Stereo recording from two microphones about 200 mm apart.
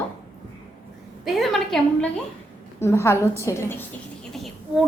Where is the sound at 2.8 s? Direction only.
15° left (ahead or behind).